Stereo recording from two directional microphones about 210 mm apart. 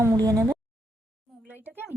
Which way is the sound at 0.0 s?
15° right (ahead or behind).